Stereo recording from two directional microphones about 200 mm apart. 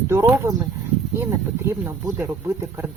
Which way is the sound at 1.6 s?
10° right (ahead or behind).